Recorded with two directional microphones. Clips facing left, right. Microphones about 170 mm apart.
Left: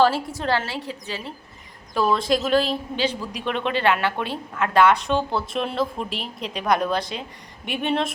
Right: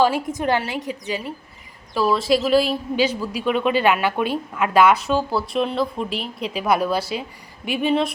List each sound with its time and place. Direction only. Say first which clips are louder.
0.0 s a woman's voice: right 1 dB; 15° right (ahead or behind)
1.9 s a woman's voice: right 2 dB; 5° right (ahead or behind)